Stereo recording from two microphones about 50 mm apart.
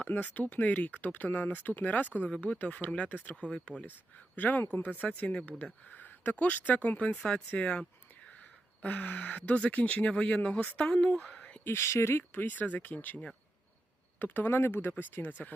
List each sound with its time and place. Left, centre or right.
0.0 s speech: left
4.4 s speech: left
5.9 s a sound: left
6.3 s speech: left
7.2 s speech: centre
11.3 s a sound: left
11.6 s speech: left
14.2 s speech: left